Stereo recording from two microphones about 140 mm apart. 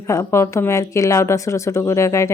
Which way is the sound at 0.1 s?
20° left (ahead or behind).